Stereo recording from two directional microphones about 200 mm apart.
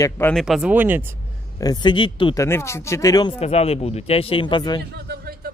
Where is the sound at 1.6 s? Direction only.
20° left (ahead or behind).